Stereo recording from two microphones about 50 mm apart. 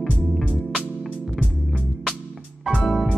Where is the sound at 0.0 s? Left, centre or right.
Centre.